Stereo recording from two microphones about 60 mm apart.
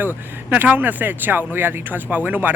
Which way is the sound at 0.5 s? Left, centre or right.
Right.